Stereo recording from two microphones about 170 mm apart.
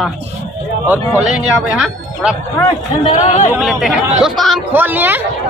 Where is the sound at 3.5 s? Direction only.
5° right (ahead or behind).